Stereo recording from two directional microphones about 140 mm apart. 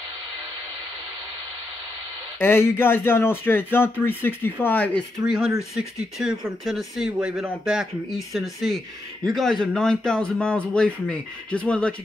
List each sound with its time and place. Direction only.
2.3 s speech: 15° left (ahead or behind)
5.2 s speech: 5° right (ahead or behind)